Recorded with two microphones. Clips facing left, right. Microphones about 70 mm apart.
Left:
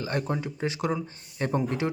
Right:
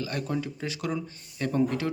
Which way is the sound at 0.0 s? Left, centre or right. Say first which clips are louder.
Left 1 dB; left.